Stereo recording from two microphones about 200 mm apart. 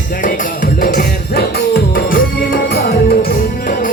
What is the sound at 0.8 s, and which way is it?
Music, 45° left (ahead or behind).